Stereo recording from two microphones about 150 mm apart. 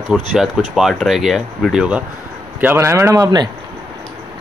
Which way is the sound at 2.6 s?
15° right (ahead or behind).